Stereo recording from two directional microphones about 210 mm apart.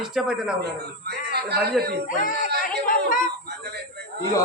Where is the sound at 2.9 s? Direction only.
40° left (ahead or behind).